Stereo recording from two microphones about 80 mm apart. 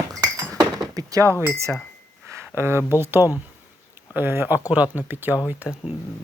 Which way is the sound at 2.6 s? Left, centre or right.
Right.